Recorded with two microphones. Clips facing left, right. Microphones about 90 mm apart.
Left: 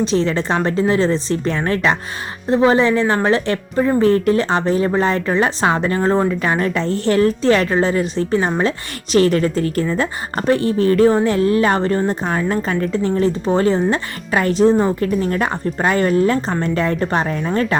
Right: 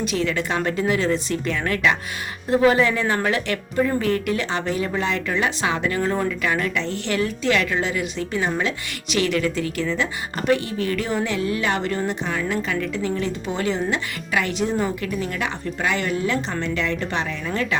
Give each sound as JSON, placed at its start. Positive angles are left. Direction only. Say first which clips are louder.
{"t": 0.0, "sound": "speech", "louder": "left 6 dB", "side_deg": 30}